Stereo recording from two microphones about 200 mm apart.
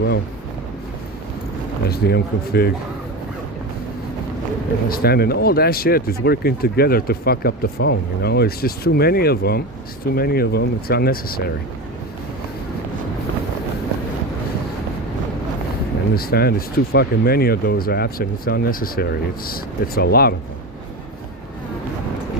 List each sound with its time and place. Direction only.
1.9 s speech: 50° left (ahead or behind)
4.9 s speech: 50° left (ahead or behind)
16.1 s speech: 50° left (ahead or behind)